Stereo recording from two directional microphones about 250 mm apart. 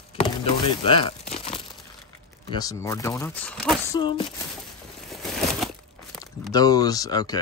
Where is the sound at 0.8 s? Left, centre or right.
Left.